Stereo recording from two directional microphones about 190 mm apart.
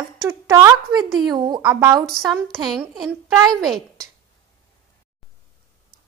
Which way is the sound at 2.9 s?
Centre (ahead or behind).